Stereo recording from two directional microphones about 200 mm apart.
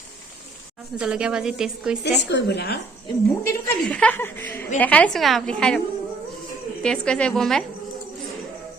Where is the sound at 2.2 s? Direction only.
60° left (ahead or behind).